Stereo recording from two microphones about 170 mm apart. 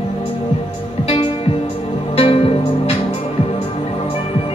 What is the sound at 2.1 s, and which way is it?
Music, 35° left (ahead or behind).